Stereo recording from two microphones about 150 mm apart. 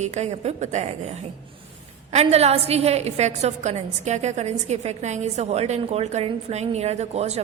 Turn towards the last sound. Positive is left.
turn(degrees=-45)  # may be behind; listen again after turning